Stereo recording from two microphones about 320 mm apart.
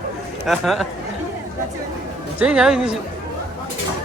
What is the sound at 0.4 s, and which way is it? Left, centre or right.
Speech, centre.